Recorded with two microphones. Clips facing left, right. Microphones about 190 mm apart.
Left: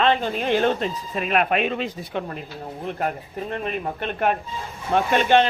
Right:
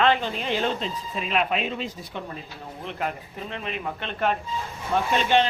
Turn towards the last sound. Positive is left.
turn(degrees=55)  # may be behind; listen again after turning